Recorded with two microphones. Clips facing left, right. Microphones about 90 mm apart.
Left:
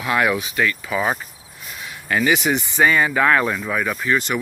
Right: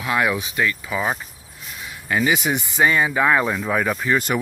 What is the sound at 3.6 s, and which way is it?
Speech, 35° right (ahead or behind).